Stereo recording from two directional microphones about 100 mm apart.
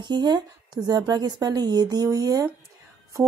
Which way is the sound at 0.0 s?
50° right (ahead or behind).